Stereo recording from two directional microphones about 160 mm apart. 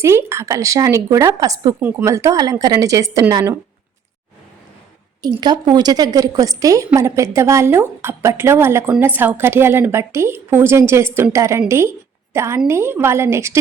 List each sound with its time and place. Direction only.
0.0 s a woman's voice: 15° right (ahead or behind)
5.2 s a woman's voice: 25° right (ahead or behind)